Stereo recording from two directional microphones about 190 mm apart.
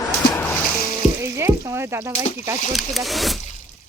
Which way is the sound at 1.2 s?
15° right (ahead or behind).